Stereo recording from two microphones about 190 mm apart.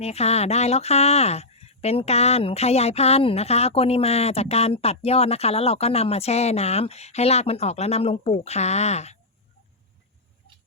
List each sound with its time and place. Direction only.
0.0 s speech: 35° left (ahead or behind)